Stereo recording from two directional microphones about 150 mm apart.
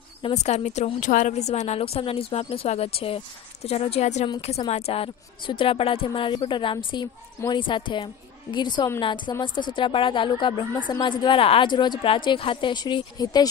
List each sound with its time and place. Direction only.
0.2 s a woman's voice: 50° left (ahead or behind); by 13.5 s 25° left (ahead or behind)